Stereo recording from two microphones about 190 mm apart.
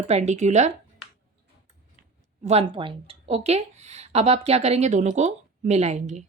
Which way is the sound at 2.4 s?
30° right (ahead or behind).